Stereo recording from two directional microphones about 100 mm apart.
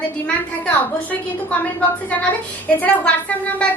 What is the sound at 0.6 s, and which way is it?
Speech, 15° left (ahead or behind).